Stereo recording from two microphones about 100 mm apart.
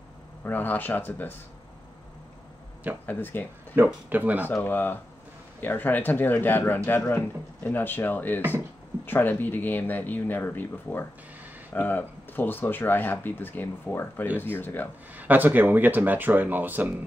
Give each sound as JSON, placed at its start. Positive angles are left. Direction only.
{"t": 0.4, "sound": "speech", "side_deg": 20}
{"t": 3.1, "sound": "speech", "side_deg": 20}
{"t": 3.7, "sound": "speech", "side_deg": -20}
{"t": 4.5, "sound": "speech", "side_deg": 20}
{"t": 15.1, "sound": "speech", "side_deg": -20}